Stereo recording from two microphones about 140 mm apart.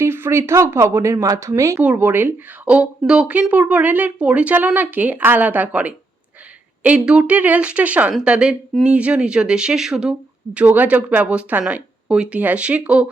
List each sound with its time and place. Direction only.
0.0 s speech: 15° right (ahead or behind)